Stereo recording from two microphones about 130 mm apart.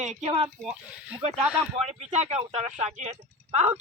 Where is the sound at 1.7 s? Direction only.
65° right (ahead or behind).